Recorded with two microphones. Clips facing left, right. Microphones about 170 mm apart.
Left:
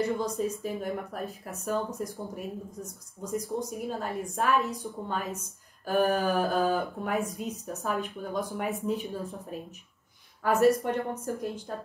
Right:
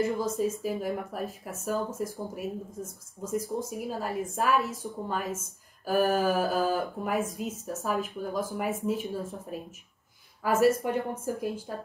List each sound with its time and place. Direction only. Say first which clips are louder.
0.0 s speech: right 1 dB; 5° right (ahead or behind)